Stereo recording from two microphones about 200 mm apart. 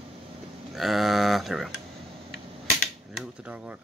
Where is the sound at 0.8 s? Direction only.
Centre (ahead or behind).